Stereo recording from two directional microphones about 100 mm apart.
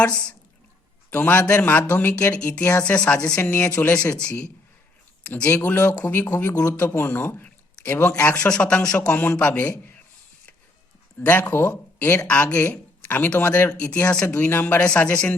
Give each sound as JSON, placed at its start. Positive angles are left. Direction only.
{"t": 0.0, "sound": "speech", "side_deg": 10}
{"t": 11.2, "sound": "speech", "side_deg": 15}